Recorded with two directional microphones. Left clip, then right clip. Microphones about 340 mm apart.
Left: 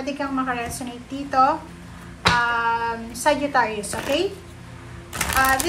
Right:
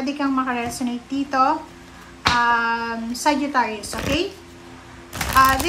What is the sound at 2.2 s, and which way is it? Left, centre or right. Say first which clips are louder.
Speech: right 1 dB; centre.